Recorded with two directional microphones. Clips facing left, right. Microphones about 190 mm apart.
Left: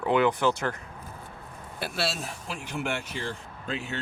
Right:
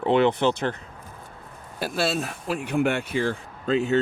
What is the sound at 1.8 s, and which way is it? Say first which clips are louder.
Speech: right 6 dB; 50° right (ahead or behind).